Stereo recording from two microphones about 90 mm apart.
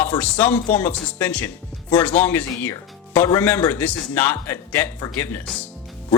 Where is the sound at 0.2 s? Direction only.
15° left (ahead or behind).